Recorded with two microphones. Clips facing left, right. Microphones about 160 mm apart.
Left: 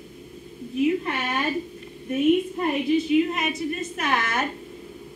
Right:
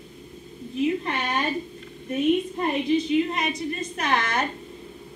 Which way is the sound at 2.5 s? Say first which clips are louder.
Left 1 dB; 25° right (ahead or behind).